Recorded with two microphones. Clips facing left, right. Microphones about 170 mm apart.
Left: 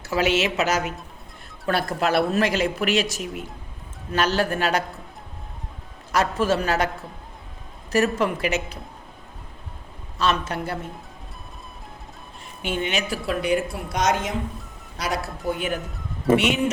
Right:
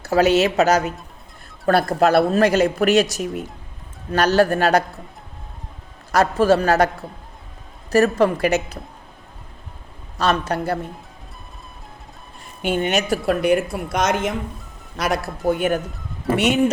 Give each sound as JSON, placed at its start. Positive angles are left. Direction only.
{"t": 0.0, "sound": "speech", "side_deg": -40}
{"t": 6.1, "sound": "speech", "side_deg": -35}
{"t": 10.2, "sound": "speech", "side_deg": -40}
{"t": 12.6, "sound": "speech", "side_deg": -45}